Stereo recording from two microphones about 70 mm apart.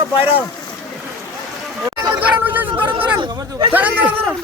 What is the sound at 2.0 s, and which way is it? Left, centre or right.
A man's voice, right.